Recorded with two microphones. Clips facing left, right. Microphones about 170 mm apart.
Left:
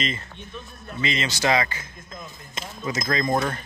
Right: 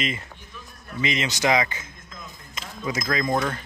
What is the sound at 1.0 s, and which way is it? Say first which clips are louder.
Speech: right 1 dB; 15° right (ahead or behind).